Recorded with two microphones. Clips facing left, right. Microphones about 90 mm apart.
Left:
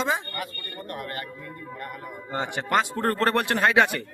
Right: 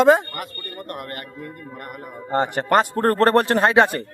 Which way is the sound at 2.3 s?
45° right (ahead or behind).